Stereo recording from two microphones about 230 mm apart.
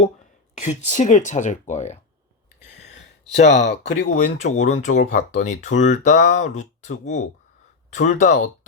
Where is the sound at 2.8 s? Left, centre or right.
Left.